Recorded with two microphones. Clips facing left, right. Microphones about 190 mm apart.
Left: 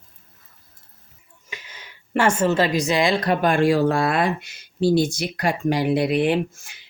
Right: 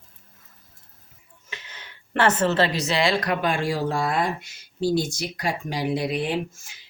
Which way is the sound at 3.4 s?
55° left (ahead or behind).